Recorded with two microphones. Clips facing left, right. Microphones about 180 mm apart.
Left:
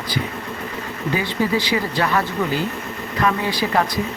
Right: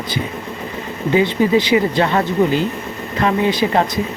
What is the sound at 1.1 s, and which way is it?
Speech, 20° right (ahead or behind).